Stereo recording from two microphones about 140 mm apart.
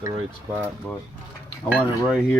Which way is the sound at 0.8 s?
5° left (ahead or behind).